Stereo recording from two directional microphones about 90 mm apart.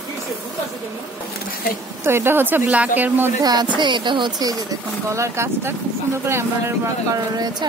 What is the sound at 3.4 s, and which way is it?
Speech, 45° right (ahead or behind).